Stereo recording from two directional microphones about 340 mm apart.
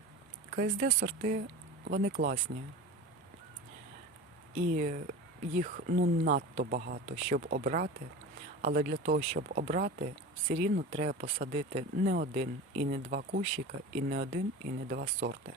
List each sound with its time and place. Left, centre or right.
0.5 s speech: right
4.8 s speech: right